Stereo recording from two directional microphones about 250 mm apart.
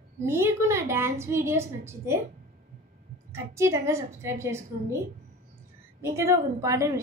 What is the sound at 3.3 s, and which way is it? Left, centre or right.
A woman's voice, centre.